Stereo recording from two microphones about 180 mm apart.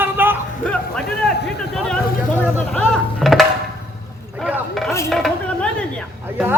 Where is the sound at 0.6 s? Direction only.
5° left (ahead or behind).